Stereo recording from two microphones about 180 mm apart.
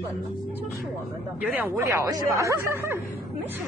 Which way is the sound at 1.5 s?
10° right (ahead or behind).